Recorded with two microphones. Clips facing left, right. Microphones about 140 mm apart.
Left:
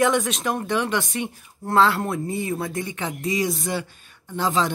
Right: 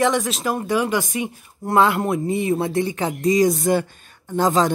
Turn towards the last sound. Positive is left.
turn(degrees=-45)  # may be behind; listen again after turning